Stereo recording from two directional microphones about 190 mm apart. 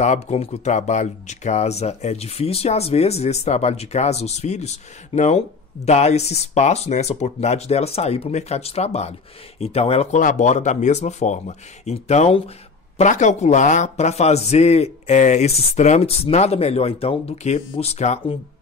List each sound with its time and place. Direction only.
0.0 s speech: 35° left (ahead or behind)